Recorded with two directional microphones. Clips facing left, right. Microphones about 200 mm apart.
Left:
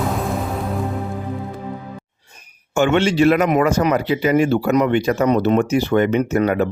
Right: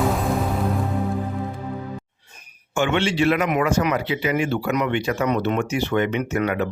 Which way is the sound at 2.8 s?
45° left (ahead or behind).